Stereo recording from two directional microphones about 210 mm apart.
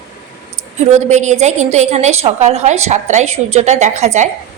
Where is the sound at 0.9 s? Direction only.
35° right (ahead or behind).